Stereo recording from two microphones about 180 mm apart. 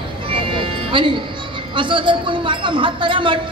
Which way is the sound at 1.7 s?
25° right (ahead or behind).